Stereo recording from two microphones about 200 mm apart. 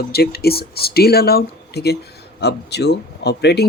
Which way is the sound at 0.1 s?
50° left (ahead or behind).